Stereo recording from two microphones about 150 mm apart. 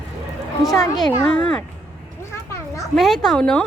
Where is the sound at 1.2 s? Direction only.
5° left (ahead or behind).